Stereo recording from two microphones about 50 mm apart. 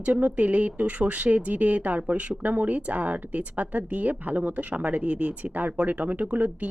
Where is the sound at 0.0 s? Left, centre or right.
Right.